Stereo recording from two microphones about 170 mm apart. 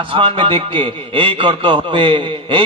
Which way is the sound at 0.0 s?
30° right (ahead or behind).